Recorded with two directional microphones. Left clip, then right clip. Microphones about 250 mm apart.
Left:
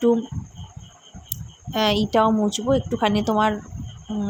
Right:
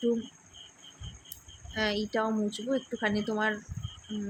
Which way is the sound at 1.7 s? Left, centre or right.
Left.